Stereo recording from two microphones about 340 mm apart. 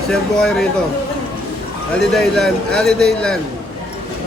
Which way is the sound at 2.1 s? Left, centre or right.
Centre.